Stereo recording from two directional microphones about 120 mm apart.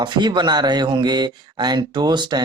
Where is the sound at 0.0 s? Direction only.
40° right (ahead or behind).